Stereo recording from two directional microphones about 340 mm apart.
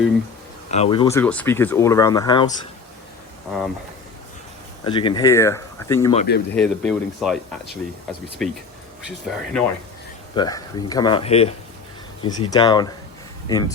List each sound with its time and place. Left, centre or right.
0.7 s speech: centre
4.8 s speech: centre
6.1 s speech: left
6.5 s speech: centre
8.4 s speech: centre